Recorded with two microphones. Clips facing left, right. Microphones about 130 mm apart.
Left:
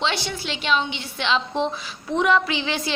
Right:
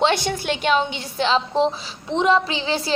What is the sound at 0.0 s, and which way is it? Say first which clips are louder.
A woman's voice: right 6 dB; 50° right (ahead or behind).